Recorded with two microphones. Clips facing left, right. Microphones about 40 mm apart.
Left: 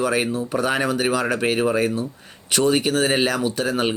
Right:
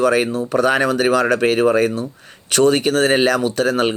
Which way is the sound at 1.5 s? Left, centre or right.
Centre.